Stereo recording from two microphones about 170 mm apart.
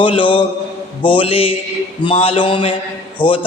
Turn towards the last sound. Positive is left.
turn(degrees=30)  # may be behind; listen again after turning